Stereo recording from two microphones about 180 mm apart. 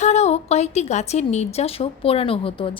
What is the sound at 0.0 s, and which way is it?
A woman's voice, 40° left (ahead or behind).